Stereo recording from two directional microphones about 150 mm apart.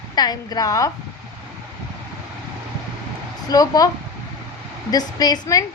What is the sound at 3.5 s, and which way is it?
Speech, 25° left (ahead or behind).